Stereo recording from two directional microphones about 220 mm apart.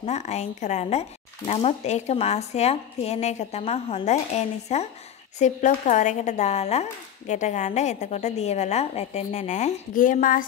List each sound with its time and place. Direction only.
0.0 s speech: 30° left (ahead or behind)